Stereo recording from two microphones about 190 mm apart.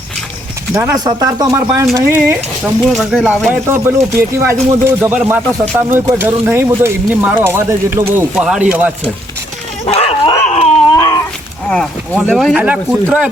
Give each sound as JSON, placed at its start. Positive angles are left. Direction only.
{"t": 0.7, "sound": "speech", "side_deg": -10}
{"t": 2.8, "sound": "speech", "side_deg": 0}
{"t": 3.5, "sound": "speech", "side_deg": -10}
{"t": 9.8, "sound": "dog", "side_deg": 30}
{"t": 10.9, "sound": "a sound", "side_deg": 20}
{"t": 12.2, "sound": "speech", "side_deg": 5}